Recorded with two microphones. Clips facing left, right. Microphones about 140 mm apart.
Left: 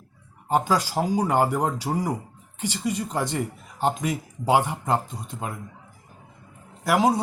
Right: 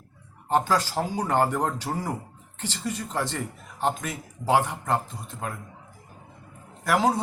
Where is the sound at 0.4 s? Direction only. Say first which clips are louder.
Left 1 dB; 10° left (ahead or behind).